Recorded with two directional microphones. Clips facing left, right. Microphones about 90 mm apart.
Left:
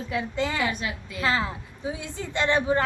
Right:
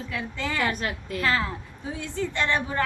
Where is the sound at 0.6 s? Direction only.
45° right (ahead or behind).